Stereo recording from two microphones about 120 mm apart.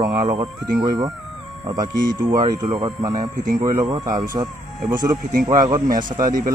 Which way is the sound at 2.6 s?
60° right (ahead or behind).